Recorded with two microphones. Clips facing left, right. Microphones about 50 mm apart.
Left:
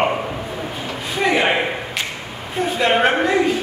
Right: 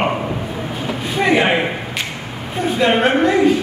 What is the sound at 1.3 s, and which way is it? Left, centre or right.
Speech, centre.